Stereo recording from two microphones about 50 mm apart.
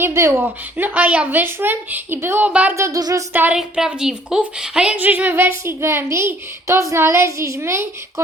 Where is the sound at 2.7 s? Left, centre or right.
Right.